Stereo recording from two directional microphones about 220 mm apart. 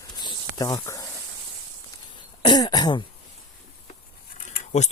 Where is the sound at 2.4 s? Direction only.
20° left (ahead or behind).